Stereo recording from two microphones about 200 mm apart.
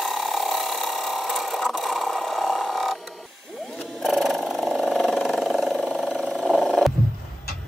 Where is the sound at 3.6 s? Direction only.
Centre (ahead or behind).